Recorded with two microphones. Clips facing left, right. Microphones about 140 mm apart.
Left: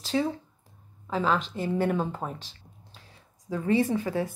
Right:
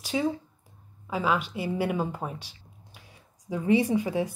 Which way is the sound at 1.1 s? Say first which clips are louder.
Left 1 dB; 10° right (ahead or behind).